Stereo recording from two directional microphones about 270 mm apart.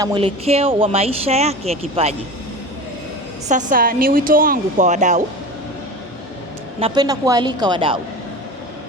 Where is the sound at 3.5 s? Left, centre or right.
Right.